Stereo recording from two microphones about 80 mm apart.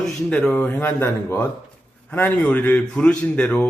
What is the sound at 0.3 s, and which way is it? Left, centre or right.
Speech, centre.